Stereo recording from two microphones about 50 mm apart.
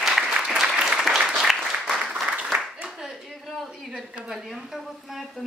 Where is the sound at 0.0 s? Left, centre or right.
Centre.